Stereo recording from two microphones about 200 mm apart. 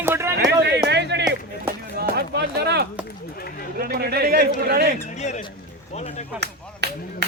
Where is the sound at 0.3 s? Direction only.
60° right (ahead or behind).